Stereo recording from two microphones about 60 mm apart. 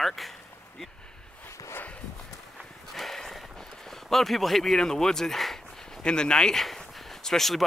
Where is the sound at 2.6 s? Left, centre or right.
Centre.